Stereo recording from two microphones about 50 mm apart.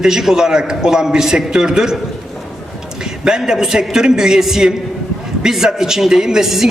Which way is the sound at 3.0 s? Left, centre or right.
Centre.